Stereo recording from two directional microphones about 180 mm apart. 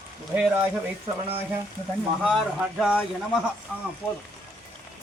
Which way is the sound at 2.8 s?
5° right (ahead or behind).